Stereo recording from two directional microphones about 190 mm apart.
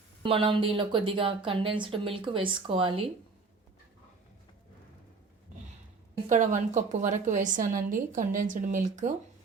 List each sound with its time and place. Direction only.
0.2 s a woman's voice: 30° right (ahead or behind)
6.2 s a woman's voice: 40° right (ahead or behind)